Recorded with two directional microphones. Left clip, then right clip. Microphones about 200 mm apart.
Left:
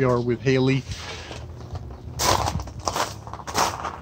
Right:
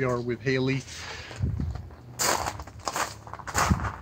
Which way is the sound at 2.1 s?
5° right (ahead or behind).